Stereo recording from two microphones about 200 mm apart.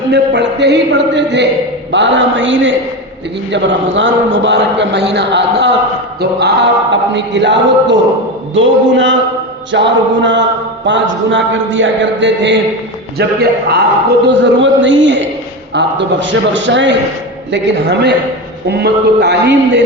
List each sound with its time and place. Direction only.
0.1 s a man's voice: 60° right (ahead or behind)
13.1 s a man's voice: 55° right (ahead or behind)
14.3 s a man's voice: 65° right (ahead or behind)